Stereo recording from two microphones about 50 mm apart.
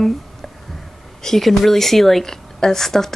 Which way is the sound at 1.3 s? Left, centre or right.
Centre.